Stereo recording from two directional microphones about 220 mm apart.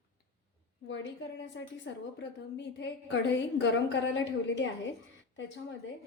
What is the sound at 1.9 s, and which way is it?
Speech, 55° left (ahead or behind).